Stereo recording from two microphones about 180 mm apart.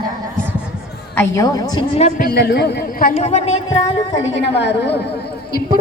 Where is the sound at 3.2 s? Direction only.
35° left (ahead or behind).